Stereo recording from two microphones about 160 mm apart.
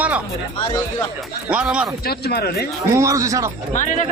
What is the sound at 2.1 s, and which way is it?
Speech, 80° left.